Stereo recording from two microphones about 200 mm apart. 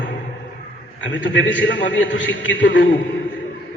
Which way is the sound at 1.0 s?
65° left (ahead or behind).